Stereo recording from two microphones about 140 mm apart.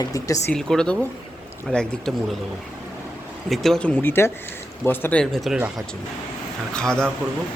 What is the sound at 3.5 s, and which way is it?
Speech, centre (ahead or behind).